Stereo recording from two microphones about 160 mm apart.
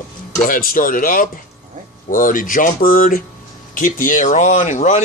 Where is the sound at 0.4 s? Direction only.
60° left (ahead or behind).